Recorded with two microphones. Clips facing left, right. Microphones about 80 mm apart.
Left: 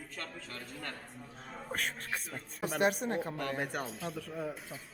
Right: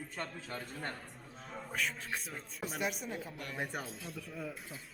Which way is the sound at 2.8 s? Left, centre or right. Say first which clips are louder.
Left 9 dB; left.